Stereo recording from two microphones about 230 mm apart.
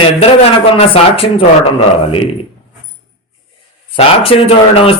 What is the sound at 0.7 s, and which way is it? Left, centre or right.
Speech, left.